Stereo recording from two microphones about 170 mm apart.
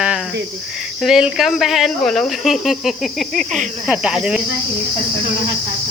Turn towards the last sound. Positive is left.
turn(degrees=-5)  # may be behind; listen again after turning